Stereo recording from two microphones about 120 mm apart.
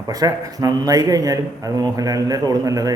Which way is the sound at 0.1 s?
30° right (ahead or behind).